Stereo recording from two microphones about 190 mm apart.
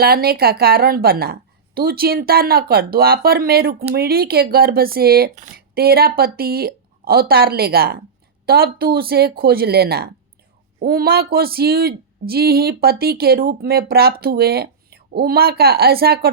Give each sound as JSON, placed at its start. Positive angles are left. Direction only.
{"t": 0.0, "sound": "speech", "side_deg": -55}